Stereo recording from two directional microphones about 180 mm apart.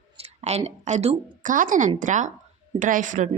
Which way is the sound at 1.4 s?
45° right (ahead or behind).